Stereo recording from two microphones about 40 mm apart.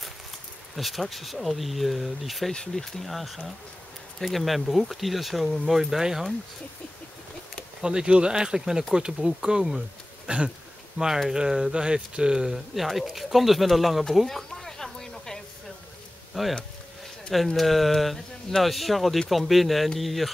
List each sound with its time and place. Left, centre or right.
0.7 s speech: centre
7.8 s speech: right
10.2 s a sound: right
11.0 s speech: right
11.3 s speech: centre
12.8 s speech: centre
14.2 s a sound: centre
16.3 s speech: centre
17.6 s speech: centre